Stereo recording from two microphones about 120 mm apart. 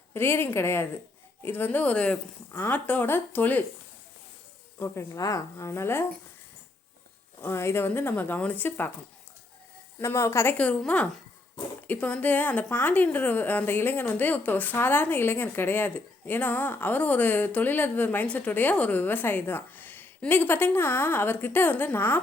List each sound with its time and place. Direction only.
0.1 s a woman's voice: 20° left (ahead or behind)
4.8 s a woman's voice: 25° left (ahead or behind)
7.4 s a woman's voice: 20° left (ahead or behind)
10.0 s a woman's voice: 20° left (ahead or behind)
10.6 s a woman's voice: 10° left (ahead or behind)